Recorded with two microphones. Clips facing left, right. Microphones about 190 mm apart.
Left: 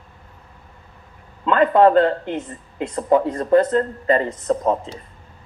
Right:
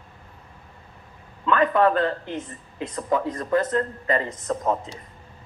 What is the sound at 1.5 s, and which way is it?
Speech, 30° left (ahead or behind).